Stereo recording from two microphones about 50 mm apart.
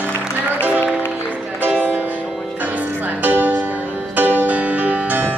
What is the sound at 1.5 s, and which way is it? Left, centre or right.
Music, right.